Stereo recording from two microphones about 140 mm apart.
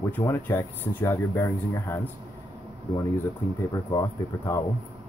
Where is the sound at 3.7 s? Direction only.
25° left (ahead or behind).